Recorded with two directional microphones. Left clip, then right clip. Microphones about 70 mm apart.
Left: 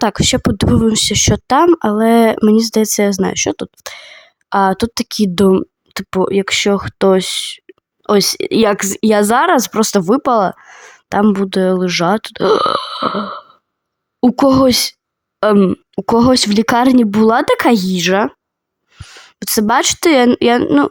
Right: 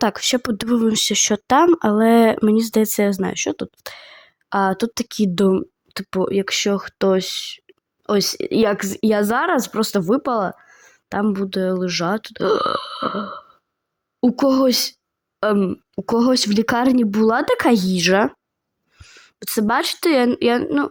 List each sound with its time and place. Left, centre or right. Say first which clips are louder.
0.0 s speech: left 5 dB; centre
1.5 s speech: left 3 dB; centre
3.3 s speech: left 6 dB; left
11.2 s speech: left 7 dB; left
18.9 s a woman's voice: left 8 dB; left